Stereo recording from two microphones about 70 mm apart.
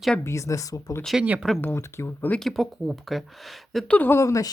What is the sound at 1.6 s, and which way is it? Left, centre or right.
Speech, left.